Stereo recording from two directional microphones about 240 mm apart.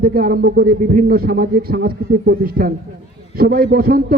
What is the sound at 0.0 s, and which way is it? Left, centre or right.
A man's voice, right.